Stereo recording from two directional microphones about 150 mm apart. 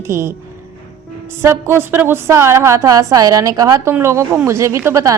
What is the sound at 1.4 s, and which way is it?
Speech, 15° right (ahead or behind).